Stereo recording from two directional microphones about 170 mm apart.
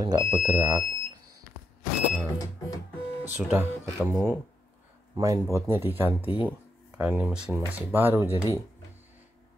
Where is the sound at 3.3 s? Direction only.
10° right (ahead or behind).